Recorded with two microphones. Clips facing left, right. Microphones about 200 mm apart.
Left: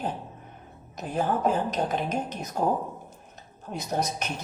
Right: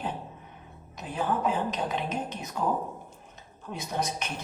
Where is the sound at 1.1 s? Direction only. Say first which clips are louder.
Left 3 dB; 45° left (ahead or behind).